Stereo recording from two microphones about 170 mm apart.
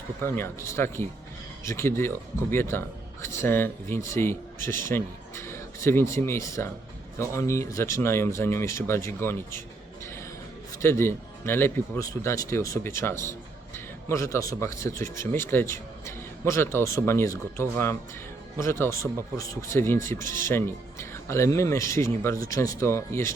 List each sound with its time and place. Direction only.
0.2 s speech: 15° left (ahead or behind)
10.7 s speech: 15° left (ahead or behind)